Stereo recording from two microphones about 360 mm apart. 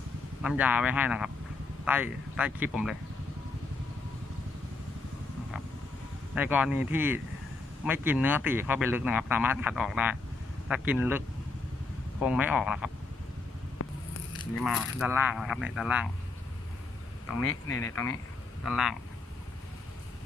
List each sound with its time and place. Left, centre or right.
0.4 s a man's voice: centre
6.3 s a man's voice: centre
12.2 s a man's voice: centre
13.8 s biting: left
14.6 s a man's voice: centre
17.2 s speech: left
17.9 s a man's voice: centre